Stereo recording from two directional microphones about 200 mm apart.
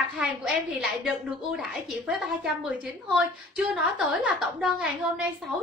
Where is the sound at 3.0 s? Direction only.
Centre (ahead or behind).